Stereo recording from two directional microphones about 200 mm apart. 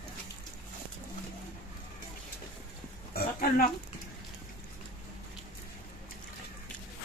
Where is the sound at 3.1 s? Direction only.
45° left (ahead or behind).